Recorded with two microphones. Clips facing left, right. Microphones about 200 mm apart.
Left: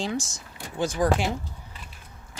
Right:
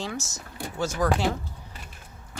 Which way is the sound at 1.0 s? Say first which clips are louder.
Left 2 dB; 25° left (ahead or behind).